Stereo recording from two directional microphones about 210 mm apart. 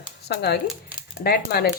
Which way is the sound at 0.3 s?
50° left (ahead or behind).